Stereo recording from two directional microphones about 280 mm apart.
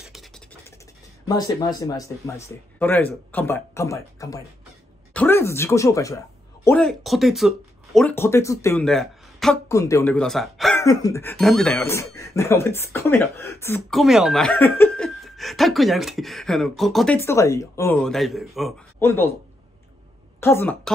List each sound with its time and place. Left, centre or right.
0.0 s a sound: centre
1.2 s speech: centre
20.3 s speech: centre